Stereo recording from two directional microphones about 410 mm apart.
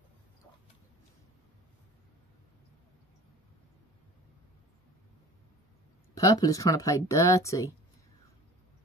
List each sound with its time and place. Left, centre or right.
6.1 s speech: centre